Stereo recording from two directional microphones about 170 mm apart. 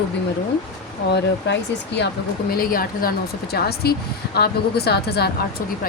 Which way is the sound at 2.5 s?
60° left (ahead or behind).